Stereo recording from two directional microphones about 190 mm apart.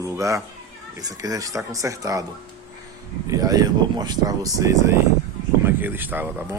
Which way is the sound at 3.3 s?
20° right (ahead or behind).